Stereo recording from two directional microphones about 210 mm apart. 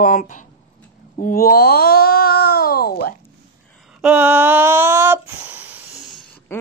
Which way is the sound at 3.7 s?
Centre (ahead or behind).